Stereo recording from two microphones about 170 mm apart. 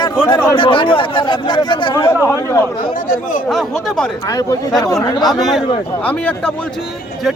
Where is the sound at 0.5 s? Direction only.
30° left (ahead or behind).